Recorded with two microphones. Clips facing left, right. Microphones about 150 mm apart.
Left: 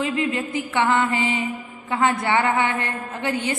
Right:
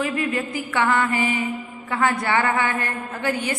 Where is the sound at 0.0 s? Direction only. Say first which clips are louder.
Even; 20° left (ahead or behind).